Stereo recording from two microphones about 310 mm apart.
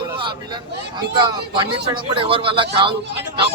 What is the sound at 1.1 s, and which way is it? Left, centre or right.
Speech, centre.